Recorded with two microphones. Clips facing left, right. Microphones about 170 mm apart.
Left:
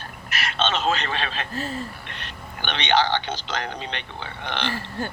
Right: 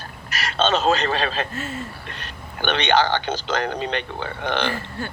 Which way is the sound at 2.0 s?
40° right (ahead or behind).